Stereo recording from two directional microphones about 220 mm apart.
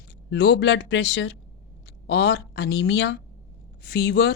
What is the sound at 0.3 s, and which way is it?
A woman's voice, 45° left (ahead or behind).